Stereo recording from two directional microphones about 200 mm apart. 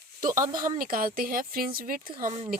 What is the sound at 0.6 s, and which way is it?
A woman's voice, 45° right (ahead or behind).